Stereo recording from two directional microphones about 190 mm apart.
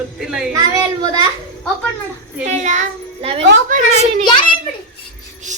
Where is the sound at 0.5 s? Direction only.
20° right (ahead or behind).